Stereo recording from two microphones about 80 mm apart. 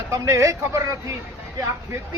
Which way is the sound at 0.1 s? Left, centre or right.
Right.